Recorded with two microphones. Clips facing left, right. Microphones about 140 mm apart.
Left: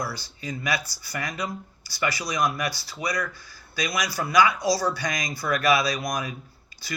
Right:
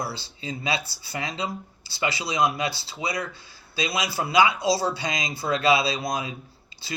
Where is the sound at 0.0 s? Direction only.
25° right (ahead or behind).